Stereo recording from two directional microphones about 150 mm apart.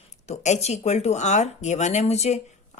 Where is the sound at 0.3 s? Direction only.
50° left (ahead or behind).